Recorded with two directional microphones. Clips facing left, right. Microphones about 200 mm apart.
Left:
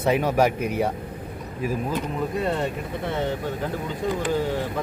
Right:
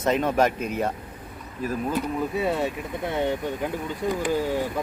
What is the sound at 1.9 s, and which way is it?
Speech, 5° right (ahead or behind).